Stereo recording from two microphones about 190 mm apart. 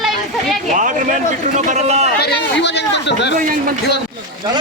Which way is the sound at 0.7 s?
40° right (ahead or behind).